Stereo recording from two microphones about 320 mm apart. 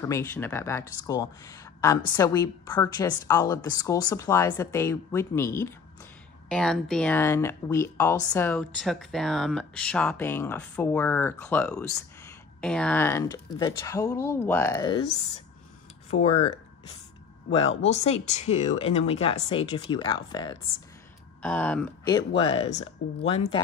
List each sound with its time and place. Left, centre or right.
0.0 s speech: centre
16.1 s speech: centre
17.5 s speech: centre